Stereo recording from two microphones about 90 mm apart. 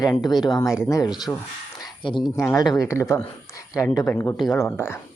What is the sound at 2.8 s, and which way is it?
Speech, 35° left (ahead or behind).